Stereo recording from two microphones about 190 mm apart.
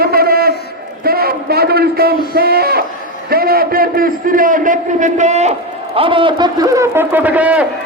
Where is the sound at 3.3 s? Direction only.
50° right (ahead or behind).